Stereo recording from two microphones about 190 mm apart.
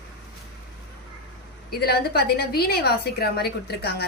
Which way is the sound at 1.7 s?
55° left (ahead or behind).